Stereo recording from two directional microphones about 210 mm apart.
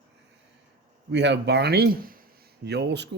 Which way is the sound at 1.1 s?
55° right (ahead or behind).